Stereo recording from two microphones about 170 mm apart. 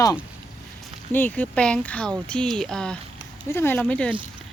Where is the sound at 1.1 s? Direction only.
10° left (ahead or behind).